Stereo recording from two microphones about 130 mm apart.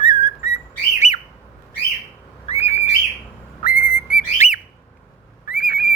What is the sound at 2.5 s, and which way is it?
Bird, 55° left (ahead or behind).